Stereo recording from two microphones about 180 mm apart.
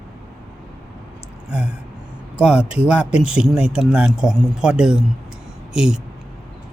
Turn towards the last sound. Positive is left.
turn(degrees=-5)  # may be behind; listen again after turning